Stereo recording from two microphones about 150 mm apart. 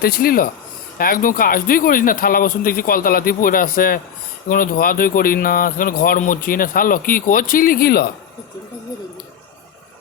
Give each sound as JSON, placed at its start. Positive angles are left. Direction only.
{"t": 0.0, "sound": "a man's voice", "side_deg": 80}